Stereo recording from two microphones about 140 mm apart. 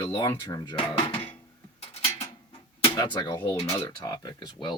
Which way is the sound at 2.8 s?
30° left (ahead or behind).